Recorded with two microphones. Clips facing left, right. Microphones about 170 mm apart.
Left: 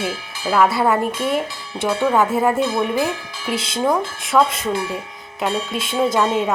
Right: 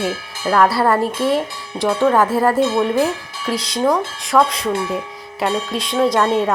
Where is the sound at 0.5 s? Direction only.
Centre (ahead or behind).